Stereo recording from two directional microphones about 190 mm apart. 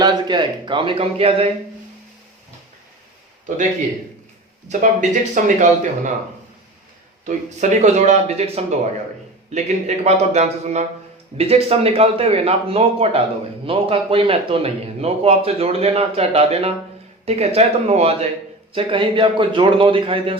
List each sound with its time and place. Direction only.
0.0 s a man's voice: 25° right (ahead or behind)
4.7 s a man's voice: 40° right (ahead or behind)
7.3 s a man's voice: 40° right (ahead or behind)